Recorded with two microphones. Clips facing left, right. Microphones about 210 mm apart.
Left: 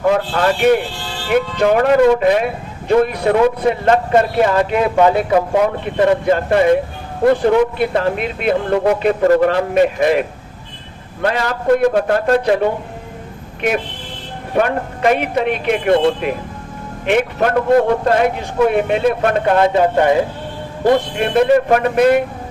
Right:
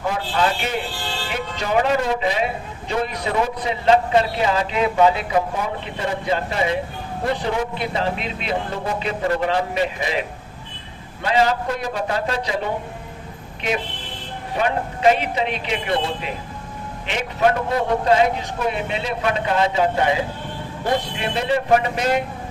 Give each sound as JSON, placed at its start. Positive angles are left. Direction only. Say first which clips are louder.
{"t": 0.3, "sound": "a man's voice", "louder": "left 7 dB", "side_deg": 55}
{"t": 5.5, "sound": "a man's voice", "louder": "left 12 dB", "side_deg": 65}
{"t": 13.6, "sound": "a man's voice", "louder": "left 6 dB", "side_deg": 55}
{"t": 17.7, "sound": "a man's voice", "louder": "left 6 dB", "side_deg": 50}
{"t": 21.2, "sound": "a man's voice", "louder": "left 9 dB", "side_deg": 55}